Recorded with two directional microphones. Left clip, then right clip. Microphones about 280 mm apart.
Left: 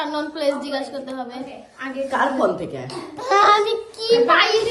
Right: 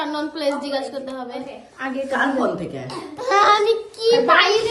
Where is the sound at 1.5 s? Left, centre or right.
Right.